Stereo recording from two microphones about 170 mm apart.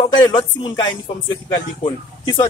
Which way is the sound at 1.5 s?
25° left (ahead or behind).